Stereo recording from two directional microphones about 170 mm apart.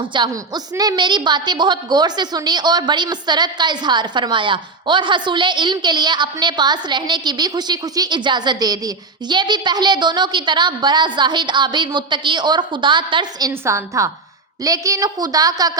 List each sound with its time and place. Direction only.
0.0 s a woman's voice: 25° right (ahead or behind)
13.5 s a woman's voice: 15° right (ahead or behind)